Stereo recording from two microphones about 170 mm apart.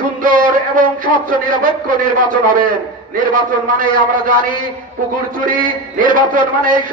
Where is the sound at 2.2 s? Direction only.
50° right (ahead or behind).